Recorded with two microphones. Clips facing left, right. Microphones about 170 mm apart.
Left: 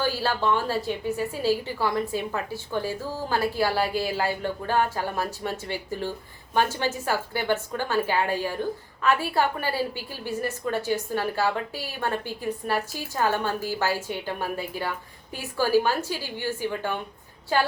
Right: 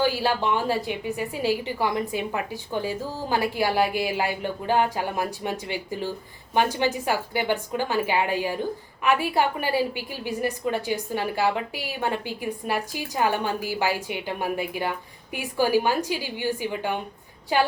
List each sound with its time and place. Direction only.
0.0 s a woman's voice: 15° right (ahead or behind)